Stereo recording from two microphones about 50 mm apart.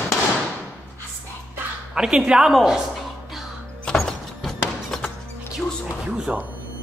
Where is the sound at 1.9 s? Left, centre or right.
Centre.